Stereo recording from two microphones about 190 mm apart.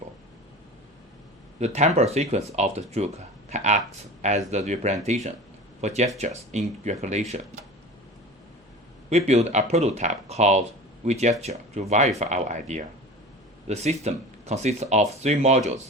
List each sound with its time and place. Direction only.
1.5 s speech: 35° right (ahead or behind)
9.0 s speech: 35° right (ahead or behind)